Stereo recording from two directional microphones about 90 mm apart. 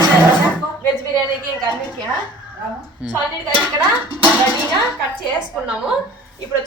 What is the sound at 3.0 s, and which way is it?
Speech, 10° right (ahead or behind).